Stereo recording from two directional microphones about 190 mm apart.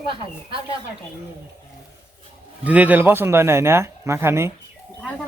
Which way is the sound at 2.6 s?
10° right (ahead or behind).